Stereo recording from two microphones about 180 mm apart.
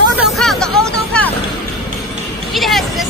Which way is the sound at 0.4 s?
Centre (ahead or behind).